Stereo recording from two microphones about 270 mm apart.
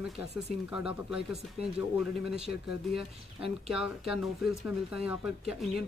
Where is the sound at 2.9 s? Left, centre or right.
Centre.